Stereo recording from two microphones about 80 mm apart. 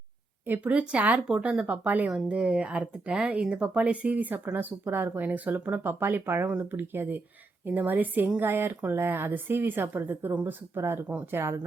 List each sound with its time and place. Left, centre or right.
0.4 s speech: right
2.0 s speech: centre; by 11.5 s right